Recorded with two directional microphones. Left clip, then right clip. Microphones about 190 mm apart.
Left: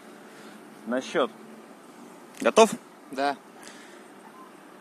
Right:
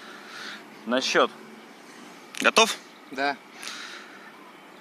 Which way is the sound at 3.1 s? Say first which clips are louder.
Even; 35° left (ahead or behind).